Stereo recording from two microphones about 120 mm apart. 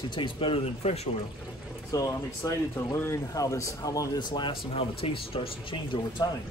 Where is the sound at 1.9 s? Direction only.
30° left (ahead or behind).